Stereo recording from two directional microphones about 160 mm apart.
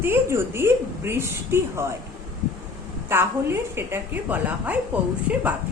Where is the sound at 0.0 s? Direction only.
15° right (ahead or behind).